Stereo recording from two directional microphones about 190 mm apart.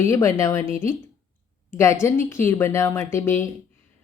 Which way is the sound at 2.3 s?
15° left (ahead or behind).